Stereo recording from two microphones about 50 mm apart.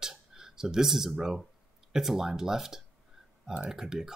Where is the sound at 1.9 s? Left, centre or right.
Centre.